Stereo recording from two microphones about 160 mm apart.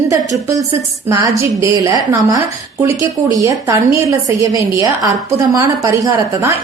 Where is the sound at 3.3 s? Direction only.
20° right (ahead or behind).